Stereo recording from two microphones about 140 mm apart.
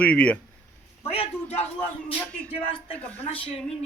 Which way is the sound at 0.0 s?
10° left (ahead or behind).